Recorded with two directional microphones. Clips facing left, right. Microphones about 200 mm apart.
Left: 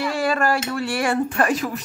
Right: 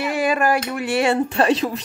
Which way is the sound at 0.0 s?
20° right (ahead or behind).